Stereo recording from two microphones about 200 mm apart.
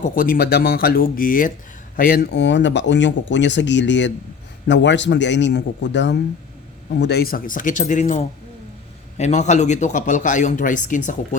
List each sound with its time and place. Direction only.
0.0 s speech: 45° left (ahead or behind)